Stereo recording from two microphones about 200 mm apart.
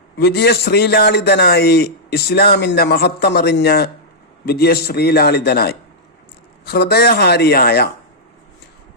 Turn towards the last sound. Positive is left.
turn(degrees=50)  # may be behind; listen again after turning